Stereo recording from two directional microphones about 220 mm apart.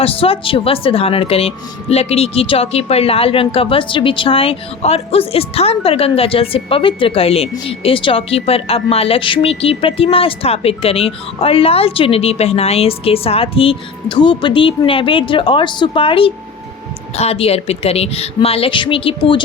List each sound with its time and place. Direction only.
0.0 s a woman's voice: 25° left (ahead or behind)